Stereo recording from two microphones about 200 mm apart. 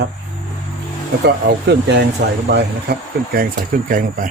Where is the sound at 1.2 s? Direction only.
55° right (ahead or behind).